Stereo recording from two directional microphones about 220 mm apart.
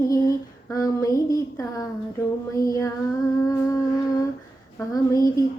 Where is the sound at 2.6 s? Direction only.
15° left (ahead or behind).